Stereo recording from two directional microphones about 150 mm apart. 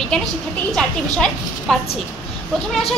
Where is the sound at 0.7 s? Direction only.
5° left (ahead or behind).